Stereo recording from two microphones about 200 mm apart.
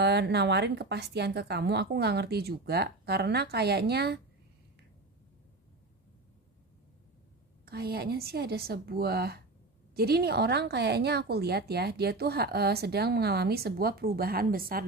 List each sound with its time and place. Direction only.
0.0 s a woman's voice: 55° right (ahead or behind)
7.6 s a woman's voice: 50° right (ahead or behind)